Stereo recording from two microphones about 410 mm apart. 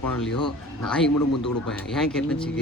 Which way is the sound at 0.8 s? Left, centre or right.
Centre.